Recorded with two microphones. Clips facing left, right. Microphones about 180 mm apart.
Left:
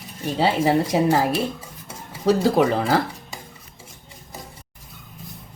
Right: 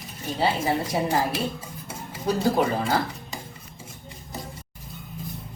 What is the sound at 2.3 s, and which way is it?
Cutlery, 85° left.